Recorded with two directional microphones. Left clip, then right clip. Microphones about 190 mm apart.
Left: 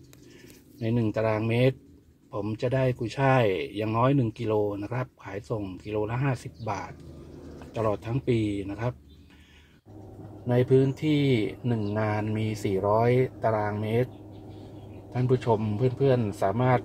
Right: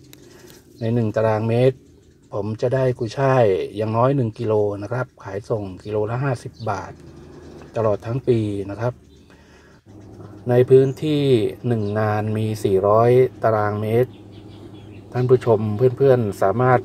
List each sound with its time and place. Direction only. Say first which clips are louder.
0.8 s speech: right 7 dB; 20° right (ahead or behind)
10.4 s speech: right 9 dB; 10° right (ahead or behind)
15.1 s speech: right 9 dB; 15° right (ahead or behind)